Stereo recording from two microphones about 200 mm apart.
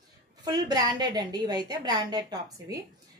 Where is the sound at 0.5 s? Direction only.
20° right (ahead or behind).